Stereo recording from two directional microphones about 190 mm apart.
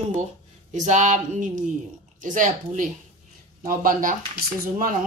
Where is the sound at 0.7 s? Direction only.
40° right (ahead or behind).